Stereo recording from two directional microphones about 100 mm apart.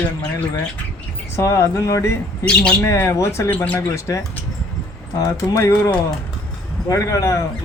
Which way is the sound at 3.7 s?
30° left (ahead or behind).